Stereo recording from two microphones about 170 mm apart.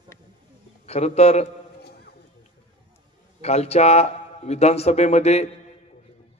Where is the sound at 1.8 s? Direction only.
70° left (ahead or behind).